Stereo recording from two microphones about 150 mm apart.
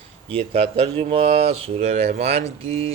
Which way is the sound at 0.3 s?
40° right (ahead or behind).